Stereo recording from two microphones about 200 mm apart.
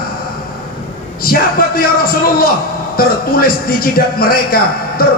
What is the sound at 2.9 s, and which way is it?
A man's voice, 50° left (ahead or behind).